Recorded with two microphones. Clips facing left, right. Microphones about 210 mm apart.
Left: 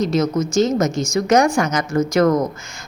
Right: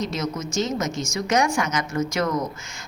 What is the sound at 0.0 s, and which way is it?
A woman's voice, 35° left (ahead or behind).